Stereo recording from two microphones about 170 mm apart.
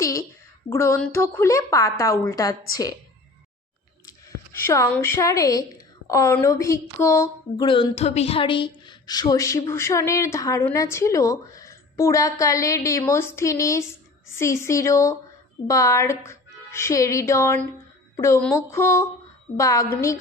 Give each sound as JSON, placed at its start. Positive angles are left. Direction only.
{"t": 0.0, "sound": "a sound", "side_deg": 20}
{"t": 0.7, "sound": "a woman's voice", "side_deg": 15}
{"t": 4.6, "sound": "a woman's voice", "side_deg": 15}
{"t": 7.6, "sound": "a woman's voice", "side_deg": 30}